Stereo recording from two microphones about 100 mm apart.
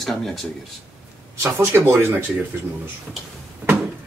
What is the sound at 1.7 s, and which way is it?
Speech, 20° right (ahead or behind).